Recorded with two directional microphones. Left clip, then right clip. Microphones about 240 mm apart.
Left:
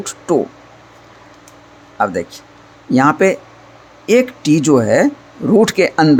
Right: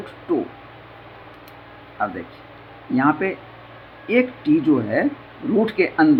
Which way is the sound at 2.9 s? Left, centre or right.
Left.